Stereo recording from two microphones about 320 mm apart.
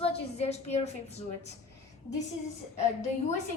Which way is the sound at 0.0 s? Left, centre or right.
Centre.